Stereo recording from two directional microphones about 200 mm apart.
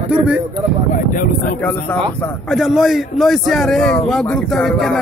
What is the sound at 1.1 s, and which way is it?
Speech, 45° left (ahead or behind).